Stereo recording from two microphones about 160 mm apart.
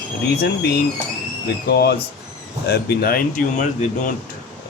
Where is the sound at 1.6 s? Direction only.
90° left.